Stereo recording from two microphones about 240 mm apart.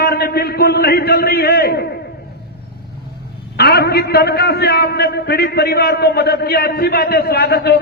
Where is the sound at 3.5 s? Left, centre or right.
Left.